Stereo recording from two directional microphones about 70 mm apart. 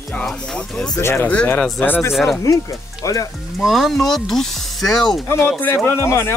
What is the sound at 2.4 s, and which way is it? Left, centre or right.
Speech, left.